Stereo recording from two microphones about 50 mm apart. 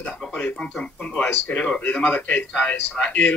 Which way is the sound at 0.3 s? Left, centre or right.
Left.